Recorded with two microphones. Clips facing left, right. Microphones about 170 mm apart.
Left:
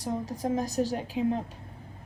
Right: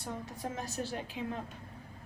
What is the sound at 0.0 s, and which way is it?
A woman's voice, 35° left (ahead or behind).